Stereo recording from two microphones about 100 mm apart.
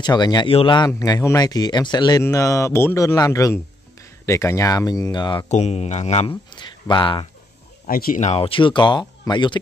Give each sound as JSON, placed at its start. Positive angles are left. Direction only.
{"t": 0.0, "sound": "speech", "side_deg": 45}
{"t": 0.5, "sound": "a man's voice", "side_deg": 70}
{"t": 0.7, "sound": "speech", "side_deg": 40}
{"t": 2.2, "sound": "speech", "side_deg": 30}
{"t": 5.2, "sound": "speech", "side_deg": 50}
{"t": 5.6, "sound": "speech", "side_deg": 90}
{"t": 6.5, "sound": "speech", "side_deg": 50}
{"t": 8.3, "sound": "speech", "side_deg": 65}